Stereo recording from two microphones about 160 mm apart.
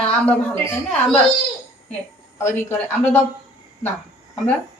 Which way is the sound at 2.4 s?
15° left (ahead or behind).